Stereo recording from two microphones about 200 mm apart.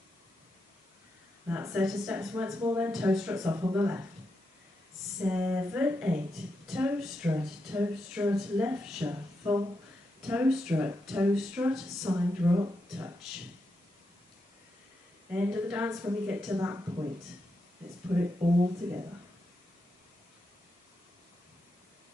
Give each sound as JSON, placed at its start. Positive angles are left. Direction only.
{"t": 1.5, "sound": "speech", "side_deg": -10}
{"t": 2.9, "sound": "speech", "side_deg": -5}
{"t": 3.3, "sound": "speech", "side_deg": -15}
{"t": 5.3, "sound": "speech", "side_deg": -10}
{"t": 15.3, "sound": "speech", "side_deg": -5}
{"t": 18.4, "sound": "speech", "side_deg": -20}